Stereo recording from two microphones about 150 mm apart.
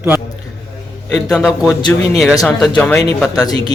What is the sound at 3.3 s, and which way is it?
Speech, 25° left (ahead or behind).